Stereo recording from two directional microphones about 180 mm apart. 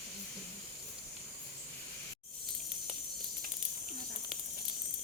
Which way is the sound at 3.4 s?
50° right (ahead or behind).